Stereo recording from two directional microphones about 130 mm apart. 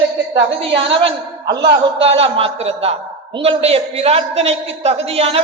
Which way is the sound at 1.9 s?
50° right (ahead or behind).